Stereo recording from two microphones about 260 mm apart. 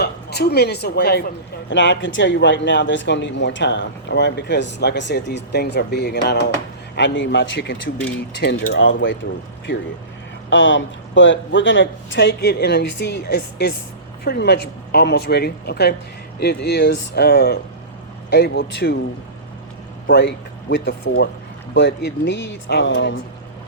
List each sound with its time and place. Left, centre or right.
0.0 s a woman's voice: left
10.5 s a man's voice: left
20.1 s a man's voice: left